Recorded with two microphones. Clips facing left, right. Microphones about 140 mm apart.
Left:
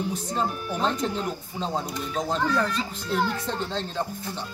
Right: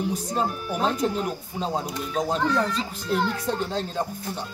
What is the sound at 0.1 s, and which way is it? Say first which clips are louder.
Speech: right 2 dB; 10° right (ahead or behind).